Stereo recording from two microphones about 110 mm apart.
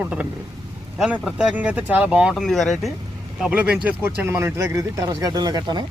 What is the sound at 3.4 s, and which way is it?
Speech, 10° right (ahead or behind).